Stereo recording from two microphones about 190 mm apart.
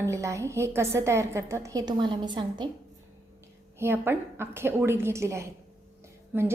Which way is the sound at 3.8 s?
10° right (ahead or behind).